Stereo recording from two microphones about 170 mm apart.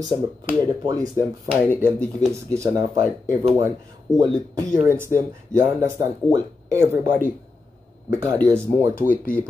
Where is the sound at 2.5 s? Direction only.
20° right (ahead or behind).